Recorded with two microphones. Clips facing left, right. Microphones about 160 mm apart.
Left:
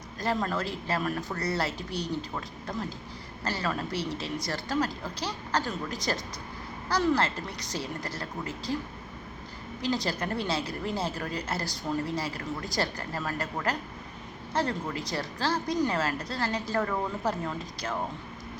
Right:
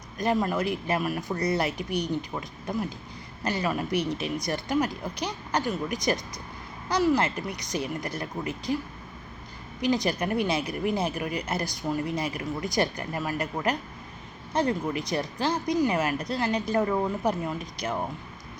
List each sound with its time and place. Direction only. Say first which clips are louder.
0.2 s a woman's voice: right 4 dB; 15° right (ahead or behind)
9.8 s a woman's voice: right 4 dB; 15° right (ahead or behind)